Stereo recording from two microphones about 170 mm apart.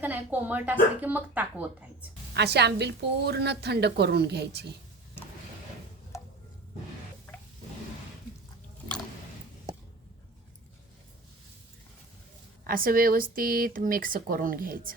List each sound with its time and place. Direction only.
0.0 s speech: 10° right (ahead or behind)
2.3 s a woman's voice: 75° right (ahead or behind)
12.6 s speech: 55° right (ahead or behind)